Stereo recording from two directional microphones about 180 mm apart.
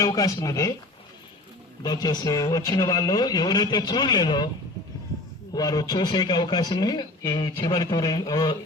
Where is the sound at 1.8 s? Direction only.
20° left (ahead or behind).